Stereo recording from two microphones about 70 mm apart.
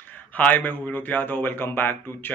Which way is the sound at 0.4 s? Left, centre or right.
Left.